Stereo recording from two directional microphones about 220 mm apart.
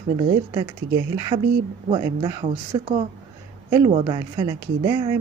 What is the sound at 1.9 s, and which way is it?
Speech, 20° right (ahead or behind).